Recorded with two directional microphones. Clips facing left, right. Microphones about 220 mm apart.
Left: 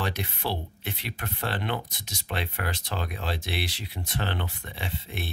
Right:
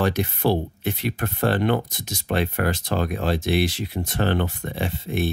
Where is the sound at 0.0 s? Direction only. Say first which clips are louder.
Right 10 dB; 45° right (ahead or behind).